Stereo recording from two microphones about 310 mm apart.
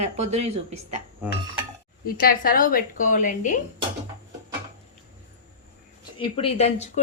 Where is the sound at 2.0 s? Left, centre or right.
Left.